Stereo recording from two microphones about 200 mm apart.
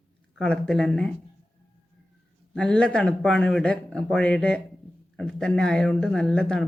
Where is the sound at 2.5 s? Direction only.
5° left (ahead or behind).